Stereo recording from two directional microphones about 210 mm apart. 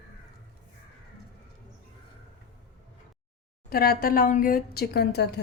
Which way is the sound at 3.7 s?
45° left (ahead or behind).